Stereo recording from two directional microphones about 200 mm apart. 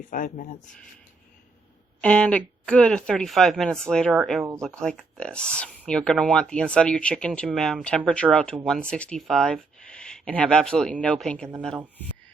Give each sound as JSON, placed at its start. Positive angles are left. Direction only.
{"t": 0.1, "sound": "speech", "side_deg": 45}
{"t": 2.0, "sound": "speech", "side_deg": 5}